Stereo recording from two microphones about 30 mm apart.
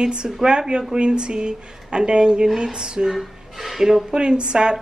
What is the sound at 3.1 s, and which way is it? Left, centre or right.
Chuckle, centre.